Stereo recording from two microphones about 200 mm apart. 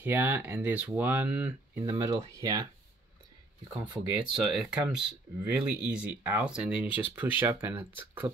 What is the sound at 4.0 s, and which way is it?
Speech, 10° right (ahead or behind).